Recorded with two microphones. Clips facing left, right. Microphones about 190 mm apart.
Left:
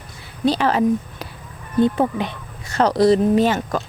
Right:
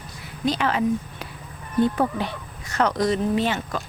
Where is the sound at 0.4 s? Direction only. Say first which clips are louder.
Left 5 dB; 35° left (ahead or behind).